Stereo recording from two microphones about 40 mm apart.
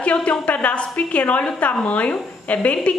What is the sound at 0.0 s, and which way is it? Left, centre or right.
A woman's voice, left.